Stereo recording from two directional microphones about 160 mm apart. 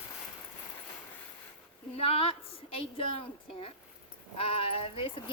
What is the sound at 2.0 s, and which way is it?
A woman's voice, 35° left (ahead or behind).